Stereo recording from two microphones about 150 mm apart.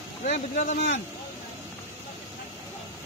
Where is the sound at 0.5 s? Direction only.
50° left (ahead or behind).